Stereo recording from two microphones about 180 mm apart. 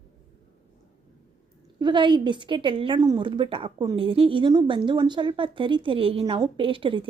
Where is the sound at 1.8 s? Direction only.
25° right (ahead or behind).